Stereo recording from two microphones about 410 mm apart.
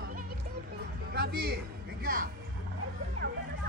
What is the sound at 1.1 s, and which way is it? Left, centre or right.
Speech, right.